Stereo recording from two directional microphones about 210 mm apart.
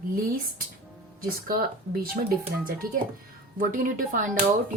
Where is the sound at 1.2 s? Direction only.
40° right (ahead or behind).